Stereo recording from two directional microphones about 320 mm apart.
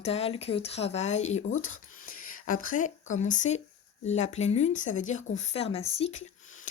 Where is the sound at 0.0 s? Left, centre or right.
Centre.